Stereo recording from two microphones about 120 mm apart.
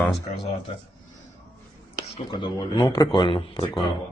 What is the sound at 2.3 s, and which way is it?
Speech, 35° left (ahead or behind).